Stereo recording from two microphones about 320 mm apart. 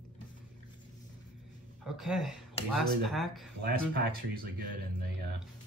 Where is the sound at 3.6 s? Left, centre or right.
Right.